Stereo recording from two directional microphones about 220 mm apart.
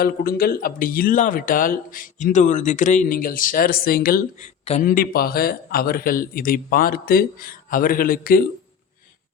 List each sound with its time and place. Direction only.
0.0 s speech: 45° left (ahead or behind)
4.6 s speech: 30° left (ahead or behind)
4.9 s speech: 40° left (ahead or behind)